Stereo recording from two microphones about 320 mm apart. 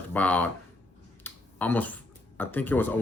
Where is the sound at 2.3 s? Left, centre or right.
Centre.